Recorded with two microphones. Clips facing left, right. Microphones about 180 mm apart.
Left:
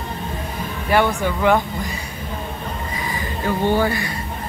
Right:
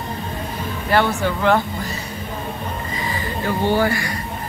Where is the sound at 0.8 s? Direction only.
15° left (ahead or behind).